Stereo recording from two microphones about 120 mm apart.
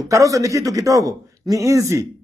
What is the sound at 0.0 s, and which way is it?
A man's voice, 25° right (ahead or behind).